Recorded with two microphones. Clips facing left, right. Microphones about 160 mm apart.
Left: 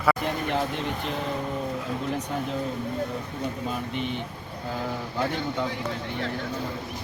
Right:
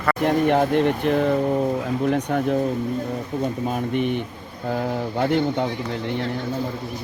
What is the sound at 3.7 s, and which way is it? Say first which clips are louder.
Speech: right 7 dB; 55° right (ahead or behind).